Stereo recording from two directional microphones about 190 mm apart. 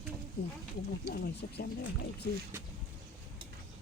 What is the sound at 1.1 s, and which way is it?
Speech, 55° left (ahead or behind).